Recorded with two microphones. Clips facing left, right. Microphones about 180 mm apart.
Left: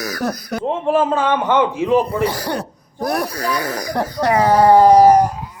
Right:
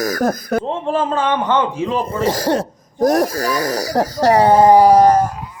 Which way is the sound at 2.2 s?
40° right (ahead or behind).